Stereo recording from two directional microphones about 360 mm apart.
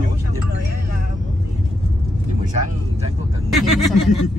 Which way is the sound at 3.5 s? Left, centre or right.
Centre.